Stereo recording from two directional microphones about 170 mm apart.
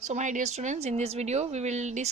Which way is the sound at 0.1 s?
45° right (ahead or behind).